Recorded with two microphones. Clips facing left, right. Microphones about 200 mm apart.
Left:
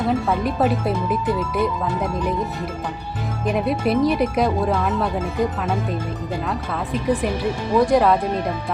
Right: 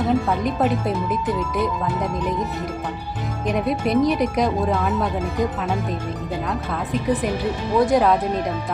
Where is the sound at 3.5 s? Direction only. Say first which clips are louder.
Left 1 dB; 5° left (ahead or behind).